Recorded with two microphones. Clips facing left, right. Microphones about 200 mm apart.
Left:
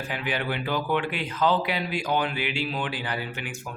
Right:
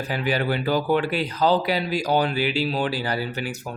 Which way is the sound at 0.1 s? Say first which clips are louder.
Right 6 dB; 40° right (ahead or behind).